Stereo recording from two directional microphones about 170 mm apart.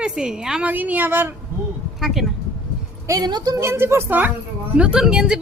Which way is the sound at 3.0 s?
20° right (ahead or behind).